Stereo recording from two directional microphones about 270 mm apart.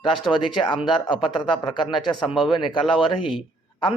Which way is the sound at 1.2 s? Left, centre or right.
Centre.